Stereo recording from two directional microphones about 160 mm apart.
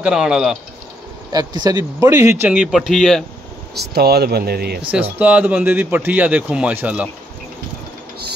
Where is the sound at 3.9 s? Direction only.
80° right.